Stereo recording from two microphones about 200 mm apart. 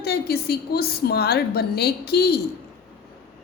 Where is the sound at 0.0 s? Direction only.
50° left (ahead or behind).